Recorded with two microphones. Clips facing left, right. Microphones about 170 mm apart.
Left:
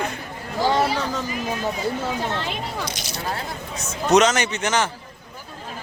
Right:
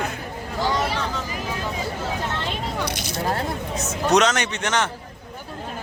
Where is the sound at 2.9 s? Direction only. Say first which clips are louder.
Right 4 dB; 55° right (ahead or behind).